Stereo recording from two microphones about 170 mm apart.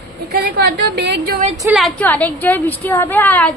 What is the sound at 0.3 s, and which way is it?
Speech, 65° right (ahead or behind).